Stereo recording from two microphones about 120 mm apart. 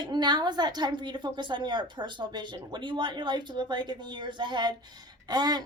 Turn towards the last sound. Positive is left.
turn(degrees=-35)  # may be behind; listen again after turning